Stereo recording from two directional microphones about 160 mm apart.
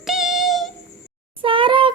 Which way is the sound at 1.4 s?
30° right (ahead or behind).